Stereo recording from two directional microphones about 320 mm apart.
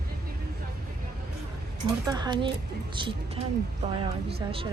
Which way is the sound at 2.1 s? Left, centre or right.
Centre.